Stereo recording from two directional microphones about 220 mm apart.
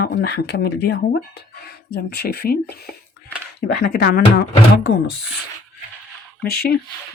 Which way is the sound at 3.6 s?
50° left (ahead or behind).